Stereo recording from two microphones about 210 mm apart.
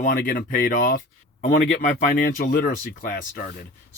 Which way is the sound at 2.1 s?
45° left (ahead or behind).